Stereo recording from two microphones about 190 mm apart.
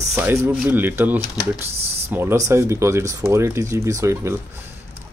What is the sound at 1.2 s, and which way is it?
Speech, 20° left (ahead or behind).